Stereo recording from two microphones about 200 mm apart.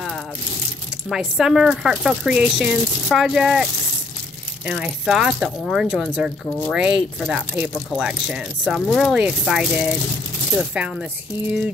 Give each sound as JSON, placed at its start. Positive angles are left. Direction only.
{"t": 1.0, "sound": "speech", "side_deg": 0}
{"t": 4.6, "sound": "speech", "side_deg": -5}